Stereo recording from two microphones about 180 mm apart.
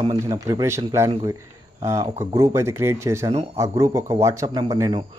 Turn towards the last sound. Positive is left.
turn(degrees=-20)  # may be behind; listen again after turning